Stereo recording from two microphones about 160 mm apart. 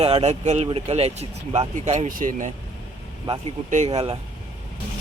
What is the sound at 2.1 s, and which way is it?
Speech, 60° right (ahead or behind).